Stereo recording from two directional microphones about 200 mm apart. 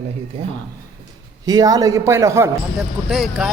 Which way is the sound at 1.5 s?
20° right (ahead or behind).